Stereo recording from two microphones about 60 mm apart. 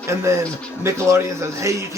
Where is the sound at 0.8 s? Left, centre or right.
Right.